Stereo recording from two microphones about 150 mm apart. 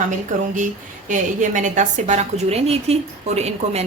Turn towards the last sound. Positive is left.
turn(degrees=-45)  # may be behind; listen again after turning